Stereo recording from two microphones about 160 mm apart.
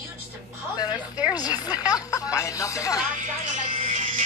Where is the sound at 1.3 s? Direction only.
25° left (ahead or behind).